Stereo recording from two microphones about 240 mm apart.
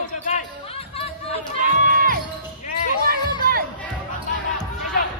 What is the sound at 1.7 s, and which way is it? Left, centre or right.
Music, right.